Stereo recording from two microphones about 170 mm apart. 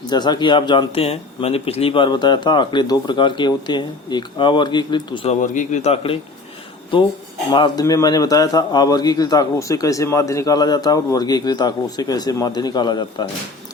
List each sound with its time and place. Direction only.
0.1 s speech: 25° left (ahead or behind)
7.5 s speech: 25° left (ahead or behind)